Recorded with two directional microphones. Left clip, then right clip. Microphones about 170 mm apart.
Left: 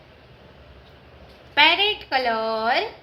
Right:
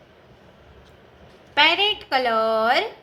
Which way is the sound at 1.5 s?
15° right (ahead or behind).